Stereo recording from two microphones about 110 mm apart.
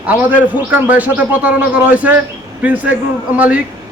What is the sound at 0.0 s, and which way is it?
Speech, 15° right (ahead or behind).